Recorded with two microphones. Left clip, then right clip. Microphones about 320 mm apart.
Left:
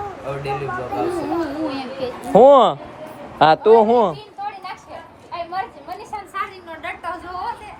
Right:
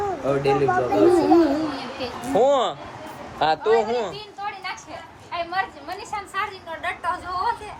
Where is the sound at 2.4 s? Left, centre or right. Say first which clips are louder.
Left 9 dB; left.